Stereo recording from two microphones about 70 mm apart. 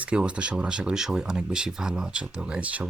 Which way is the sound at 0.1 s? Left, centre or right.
Centre.